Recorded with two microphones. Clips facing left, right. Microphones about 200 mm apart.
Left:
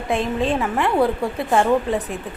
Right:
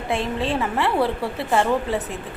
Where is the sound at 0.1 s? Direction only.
15° left (ahead or behind).